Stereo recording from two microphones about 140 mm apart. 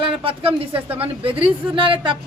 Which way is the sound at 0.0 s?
40° right (ahead or behind).